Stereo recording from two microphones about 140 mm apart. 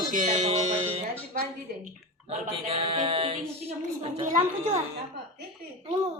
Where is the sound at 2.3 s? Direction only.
45° right (ahead or behind).